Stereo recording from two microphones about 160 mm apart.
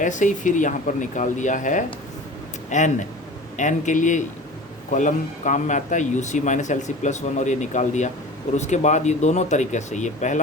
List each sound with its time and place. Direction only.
0.0 s a man's voice: 50° left (ahead or behind)